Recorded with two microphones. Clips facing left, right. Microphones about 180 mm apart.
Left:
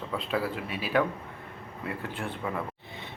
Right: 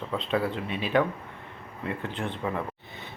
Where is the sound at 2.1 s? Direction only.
10° left (ahead or behind).